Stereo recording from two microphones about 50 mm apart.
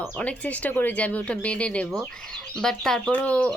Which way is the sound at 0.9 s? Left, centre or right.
Left.